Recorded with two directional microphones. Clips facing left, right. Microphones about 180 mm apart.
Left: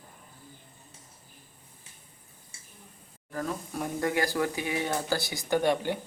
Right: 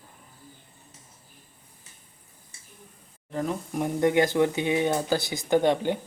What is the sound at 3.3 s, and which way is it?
Speech, 20° right (ahead or behind).